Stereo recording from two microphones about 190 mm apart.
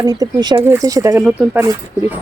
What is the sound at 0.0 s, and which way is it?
Speech, 20° right (ahead or behind).